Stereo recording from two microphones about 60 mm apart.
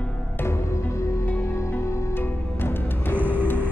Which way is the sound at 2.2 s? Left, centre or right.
Left.